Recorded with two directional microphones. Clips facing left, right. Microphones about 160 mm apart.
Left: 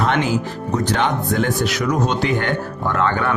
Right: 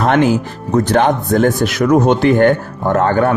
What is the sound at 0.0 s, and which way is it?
Speech, 50° right (ahead or behind).